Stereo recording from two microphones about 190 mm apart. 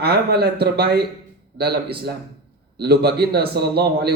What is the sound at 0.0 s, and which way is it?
A man's voice, 55° right (ahead or behind).